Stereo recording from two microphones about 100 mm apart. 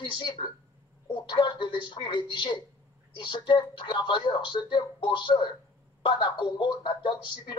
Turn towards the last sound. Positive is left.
turn(degrees=50)  # may be behind; listen again after turning